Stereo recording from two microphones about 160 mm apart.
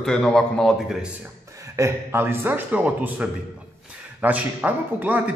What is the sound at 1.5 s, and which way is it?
A man's voice, 20° right (ahead or behind).